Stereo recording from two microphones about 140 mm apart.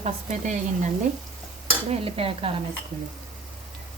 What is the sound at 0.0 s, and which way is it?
Speech, 60° right (ahead or behind).